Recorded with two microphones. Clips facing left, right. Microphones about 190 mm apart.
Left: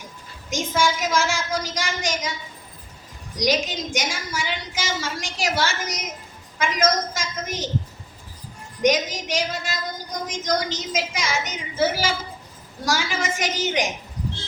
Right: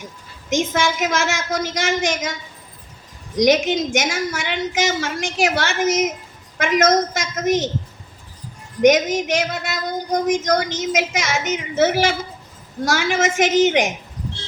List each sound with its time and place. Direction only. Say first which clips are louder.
0.5 s a woman's voice: right 3 dB; 65° right (ahead or behind)
3.4 s a woman's voice: right 7 dB; 65° right (ahead or behind)
8.8 s a woman's voice: right 7 dB; 65° right (ahead or behind)